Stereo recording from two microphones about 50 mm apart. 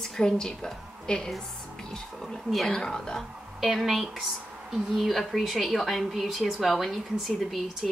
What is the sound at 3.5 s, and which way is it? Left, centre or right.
A woman's voice, centre.